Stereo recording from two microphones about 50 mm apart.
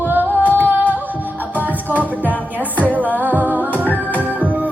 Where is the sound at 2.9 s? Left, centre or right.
Right.